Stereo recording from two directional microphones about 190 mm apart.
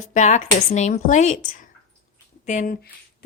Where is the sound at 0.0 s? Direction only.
40° left (ahead or behind).